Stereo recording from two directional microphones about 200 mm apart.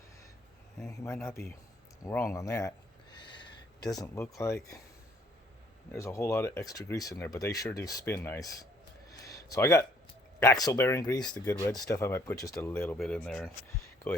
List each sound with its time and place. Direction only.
0.9 s speech: 15° left (ahead or behind)
2.0 s a sound: 15° left (ahead or behind)
3.8 s speech: 15° left (ahead or behind)
5.9 s speech: 15° left (ahead or behind)
9.0 s a sound: 15° left (ahead or behind)
10.4 s speech: 15° left (ahead or behind)